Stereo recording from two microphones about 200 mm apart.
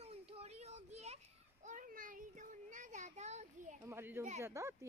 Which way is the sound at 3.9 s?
10° right (ahead or behind).